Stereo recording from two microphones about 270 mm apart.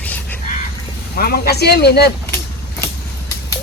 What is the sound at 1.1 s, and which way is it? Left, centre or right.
Speech, left.